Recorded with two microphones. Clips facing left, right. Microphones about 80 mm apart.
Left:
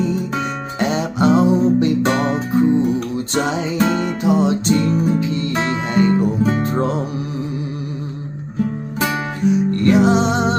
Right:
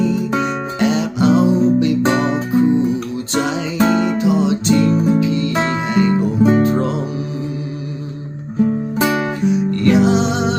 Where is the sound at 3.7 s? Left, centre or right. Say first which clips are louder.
Right 5 dB; right.